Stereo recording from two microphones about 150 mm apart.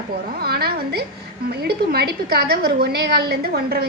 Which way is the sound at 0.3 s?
90° right.